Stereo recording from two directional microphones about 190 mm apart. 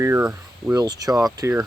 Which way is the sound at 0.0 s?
10° right (ahead or behind).